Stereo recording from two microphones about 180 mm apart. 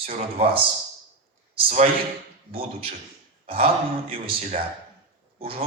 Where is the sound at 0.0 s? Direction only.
30° right (ahead or behind).